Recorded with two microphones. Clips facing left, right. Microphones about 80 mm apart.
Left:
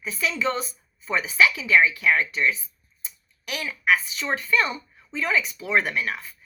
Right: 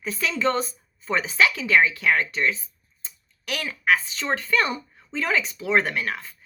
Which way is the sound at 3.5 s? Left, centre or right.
Right.